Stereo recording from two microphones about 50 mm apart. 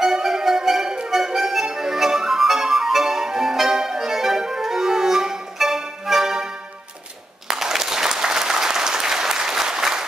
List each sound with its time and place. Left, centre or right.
0.0 s music: centre
1.1 s harmonica: centre
7.4 s applause: centre